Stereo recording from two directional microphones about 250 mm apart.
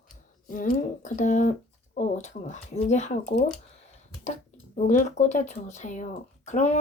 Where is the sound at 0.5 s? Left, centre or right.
Left.